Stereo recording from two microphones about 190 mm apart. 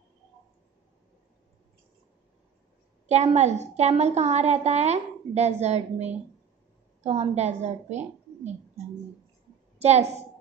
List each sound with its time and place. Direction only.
3.1 s a woman's voice: 35° right (ahead or behind)
9.8 s a woman's voice: 35° right (ahead or behind)